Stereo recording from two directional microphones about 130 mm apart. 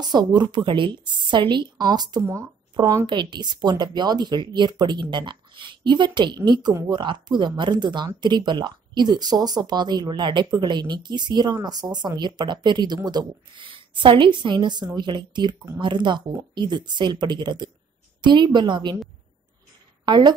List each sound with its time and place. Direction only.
0.0 s speech: 30° right (ahead or behind)
20.1 s a woman's voice: 35° right (ahead or behind)